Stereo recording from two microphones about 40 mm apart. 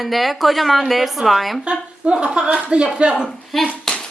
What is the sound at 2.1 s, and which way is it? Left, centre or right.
Speech, right.